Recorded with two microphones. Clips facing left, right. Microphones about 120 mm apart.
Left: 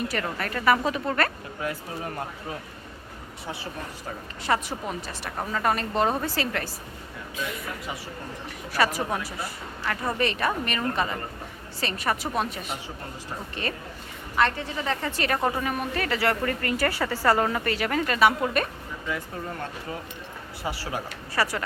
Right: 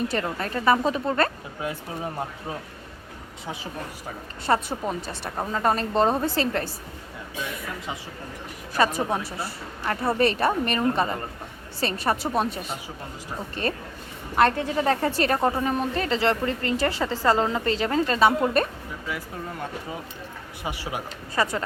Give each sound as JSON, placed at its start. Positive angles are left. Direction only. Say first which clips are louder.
{"t": 0.1, "sound": "a woman's voice", "louder": "right 2 dB", "side_deg": -25}
{"t": 3.4, "sound": "speech", "louder": "right 1 dB", "side_deg": -15}
{"t": 4.4, "sound": "a woman's voice", "louder": "right 3 dB", "side_deg": -30}
{"t": 8.7, "sound": "a woman's voice", "louder": "right 2 dB", "side_deg": -25}
{"t": 13.6, "sound": "a woman's voice", "louder": "right 5 dB", "side_deg": -35}
{"t": 15.4, "sound": "speech", "louder": "right 3 dB", "side_deg": -15}
{"t": 15.6, "sound": "a woman's voice", "louder": "right 3 dB", "side_deg": -30}
{"t": 19.0, "sound": "speech", "louder": "left 2 dB", "side_deg": -5}
{"t": 20.7, "sound": "speech", "louder": "even", "side_deg": -15}